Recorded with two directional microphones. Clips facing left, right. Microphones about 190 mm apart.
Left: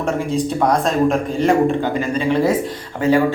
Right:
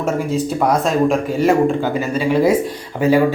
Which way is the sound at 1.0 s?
Centre (ahead or behind).